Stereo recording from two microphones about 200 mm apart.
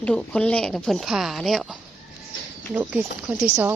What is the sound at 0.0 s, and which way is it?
Speech, 5° left (ahead or behind).